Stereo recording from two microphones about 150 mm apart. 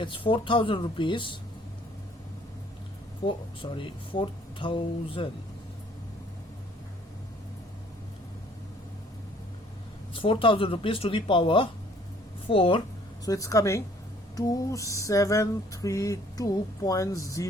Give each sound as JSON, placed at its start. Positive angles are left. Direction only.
{"t": 0.0, "sound": "speech", "side_deg": 35}
{"t": 3.2, "sound": "speech", "side_deg": 35}
{"t": 10.2, "sound": "speech", "side_deg": 35}
{"t": 13.2, "sound": "a sound", "side_deg": 20}